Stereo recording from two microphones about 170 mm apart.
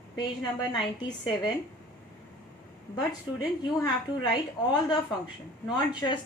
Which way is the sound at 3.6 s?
25° left (ahead or behind).